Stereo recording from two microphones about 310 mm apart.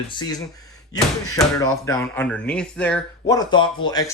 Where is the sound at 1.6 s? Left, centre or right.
Centre.